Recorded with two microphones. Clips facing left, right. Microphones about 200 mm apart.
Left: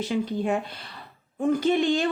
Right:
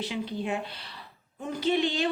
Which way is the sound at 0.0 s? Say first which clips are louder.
Left 6 dB; 45° left (ahead or behind).